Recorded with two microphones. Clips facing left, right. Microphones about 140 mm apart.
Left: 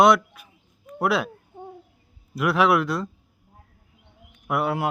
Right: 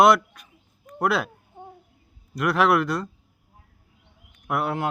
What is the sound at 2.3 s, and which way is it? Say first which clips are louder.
Speech: even; centre (ahead or behind).